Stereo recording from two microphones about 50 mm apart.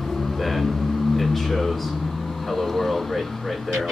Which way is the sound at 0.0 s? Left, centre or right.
Centre.